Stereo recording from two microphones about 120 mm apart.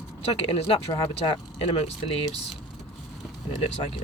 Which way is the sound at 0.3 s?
55° left (ahead or behind).